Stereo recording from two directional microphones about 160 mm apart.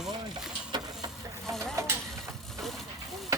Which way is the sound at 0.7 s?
25° right (ahead or behind).